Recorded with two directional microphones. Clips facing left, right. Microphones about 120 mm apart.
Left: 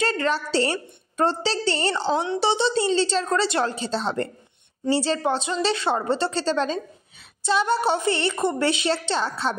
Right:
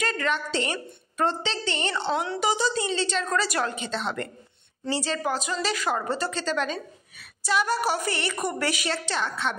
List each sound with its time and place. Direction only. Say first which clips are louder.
0.0 s a woman's voice: left 4 dB; 30° left (ahead or behind)
2.2 s a woman's voice: left 3 dB; 25° left (ahead or behind)